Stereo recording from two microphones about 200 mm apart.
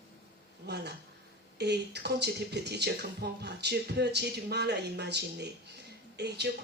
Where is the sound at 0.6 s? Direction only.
55° right (ahead or behind).